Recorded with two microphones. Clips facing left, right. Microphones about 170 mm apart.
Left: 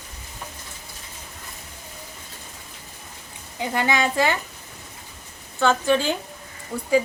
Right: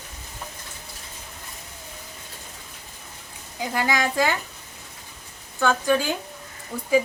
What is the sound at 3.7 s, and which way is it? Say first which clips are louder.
Speech: left 1 dB; centre (ahead or behind).